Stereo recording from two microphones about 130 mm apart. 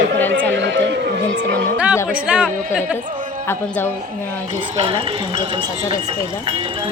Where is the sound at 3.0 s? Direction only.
80° right.